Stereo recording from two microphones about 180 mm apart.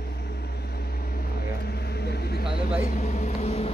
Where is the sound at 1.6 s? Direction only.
60° left (ahead or behind).